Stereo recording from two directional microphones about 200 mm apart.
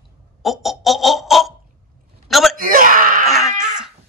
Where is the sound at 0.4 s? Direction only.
Centre (ahead or behind).